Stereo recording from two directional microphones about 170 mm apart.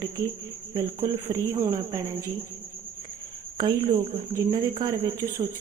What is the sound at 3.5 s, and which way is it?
Speech, 25° right (ahead or behind).